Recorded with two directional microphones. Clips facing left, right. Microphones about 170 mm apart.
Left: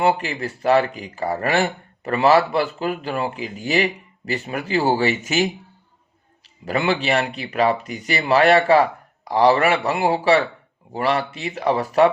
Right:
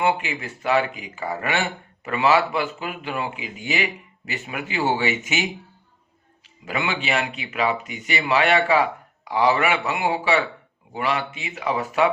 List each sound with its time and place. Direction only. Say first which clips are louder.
0.0 s speech: left 3 dB; 35° left (ahead or behind)
6.7 s speech: left 5 dB; 40° left (ahead or behind)